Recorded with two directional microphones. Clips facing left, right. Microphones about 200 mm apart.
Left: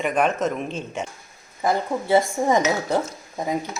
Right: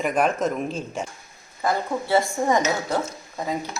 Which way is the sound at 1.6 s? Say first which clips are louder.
Left 2 dB; 20° left (ahead or behind).